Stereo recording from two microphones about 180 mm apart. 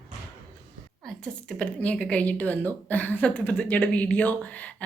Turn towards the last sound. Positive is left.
turn(degrees=10)  # may be behind; listen again after turning